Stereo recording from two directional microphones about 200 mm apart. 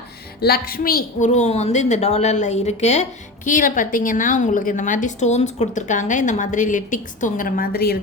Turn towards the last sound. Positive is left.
turn(degrees=50)  # may be behind; listen again after turning